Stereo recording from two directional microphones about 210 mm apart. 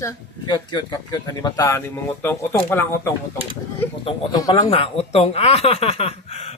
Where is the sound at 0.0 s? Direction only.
20° left (ahead or behind).